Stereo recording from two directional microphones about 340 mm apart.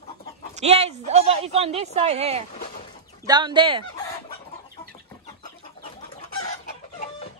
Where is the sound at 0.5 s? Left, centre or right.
Centre.